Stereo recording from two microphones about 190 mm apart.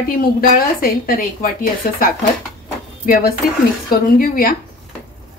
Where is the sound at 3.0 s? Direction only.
50° left (ahead or behind).